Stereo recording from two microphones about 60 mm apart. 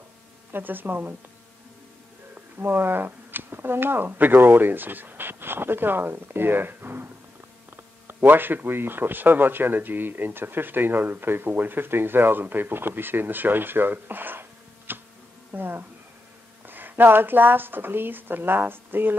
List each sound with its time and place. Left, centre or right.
0.5 s speech: right
2.3 s speech: right